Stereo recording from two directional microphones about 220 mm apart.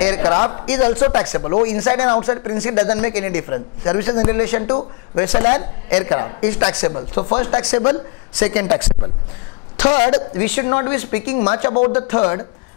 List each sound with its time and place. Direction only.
0.0 s a woman's voice: 15° left (ahead or behind)
9.8 s a woman's voice: 25° left (ahead or behind)
10.4 s a woman's voice: 10° left (ahead or behind)